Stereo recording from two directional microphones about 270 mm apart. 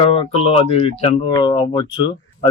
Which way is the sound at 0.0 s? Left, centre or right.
Centre.